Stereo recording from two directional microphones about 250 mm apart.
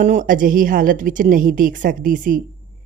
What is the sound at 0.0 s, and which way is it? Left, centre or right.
A woman's voice, right.